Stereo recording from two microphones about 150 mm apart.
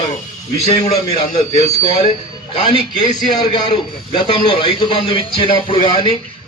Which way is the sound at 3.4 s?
30° left (ahead or behind).